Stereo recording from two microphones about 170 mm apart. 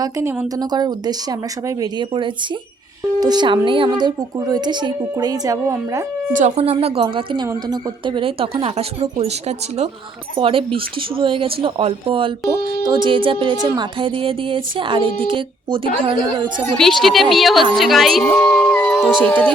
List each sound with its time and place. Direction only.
0.0 s a woman's voice: 15° right (ahead or behind)
6.3 s a woman's voice: 40° right (ahead or behind)
7.4 s a woman's voice: 20° right (ahead or behind)
8.0 s a woman's voice: 30° right (ahead or behind)
16.7 s a woman's voice: centre (ahead or behind)